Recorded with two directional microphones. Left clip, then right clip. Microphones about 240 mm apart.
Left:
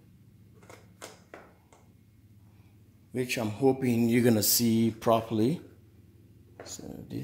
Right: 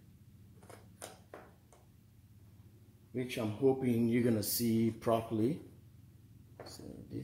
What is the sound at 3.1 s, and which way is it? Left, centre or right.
Speech, left.